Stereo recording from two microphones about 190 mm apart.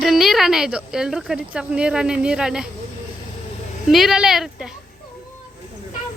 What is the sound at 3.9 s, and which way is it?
Speech, centre (ahead or behind).